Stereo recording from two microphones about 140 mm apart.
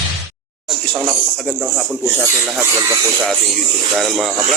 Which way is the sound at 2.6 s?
20° right (ahead or behind).